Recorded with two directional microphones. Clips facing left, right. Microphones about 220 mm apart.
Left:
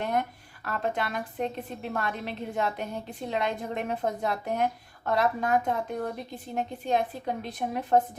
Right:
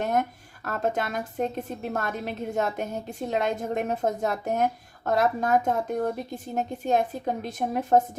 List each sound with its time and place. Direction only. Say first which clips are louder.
0.0 s speech: right 3 dB; 45° right (ahead or behind)